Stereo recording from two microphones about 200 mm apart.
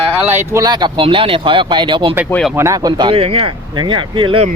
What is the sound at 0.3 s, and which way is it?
Speech, 15° right (ahead or behind).